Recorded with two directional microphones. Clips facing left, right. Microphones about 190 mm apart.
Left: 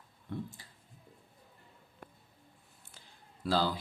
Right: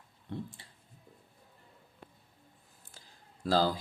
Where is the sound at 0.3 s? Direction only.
30° right (ahead or behind).